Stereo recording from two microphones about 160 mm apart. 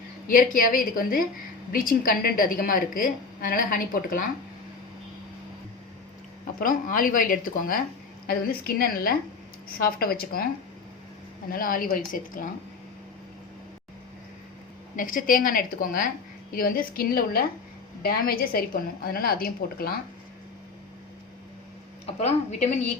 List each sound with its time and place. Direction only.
0.3 s a woman's voice: 60° left (ahead or behind)
6.6 s a woman's voice: 60° left (ahead or behind)
11.5 s a woman's voice: 60° left (ahead or behind)
14.9 s a woman's voice: 55° left (ahead or behind)
22.0 s a woman's voice: 40° left (ahead or behind)